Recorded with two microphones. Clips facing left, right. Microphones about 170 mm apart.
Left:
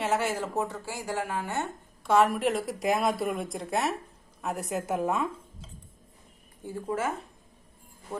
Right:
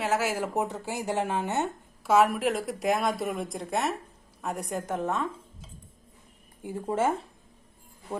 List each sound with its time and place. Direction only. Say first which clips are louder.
0.0 s a woman's voice: right 1 dB; centre (ahead or behind); by 1.7 s 20° right (ahead or behind)
2.0 s speech: right 1 dB; centre (ahead or behind)
6.6 s speech: right 1 dB; 15° right (ahead or behind)
6.8 s a woman's voice: right 4 dB; 25° right (ahead or behind)